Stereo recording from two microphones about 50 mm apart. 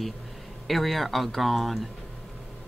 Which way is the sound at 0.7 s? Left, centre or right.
Centre.